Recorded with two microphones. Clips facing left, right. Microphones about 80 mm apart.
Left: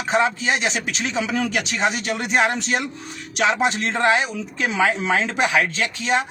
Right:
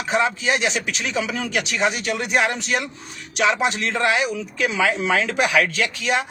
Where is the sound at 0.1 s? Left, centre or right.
Left.